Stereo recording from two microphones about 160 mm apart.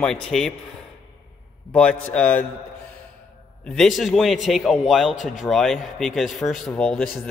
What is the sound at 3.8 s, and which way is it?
A man's voice, centre (ahead or behind).